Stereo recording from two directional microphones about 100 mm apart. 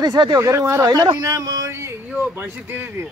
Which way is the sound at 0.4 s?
30° right (ahead or behind).